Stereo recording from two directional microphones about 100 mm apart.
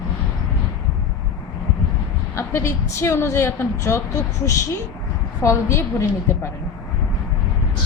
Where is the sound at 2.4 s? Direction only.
25° left (ahead or behind).